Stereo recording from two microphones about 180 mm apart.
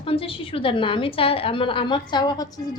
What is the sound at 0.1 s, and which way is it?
A woman's voice, 30° left (ahead or behind).